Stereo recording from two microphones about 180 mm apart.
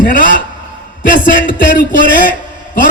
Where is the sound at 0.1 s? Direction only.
50° left (ahead or behind).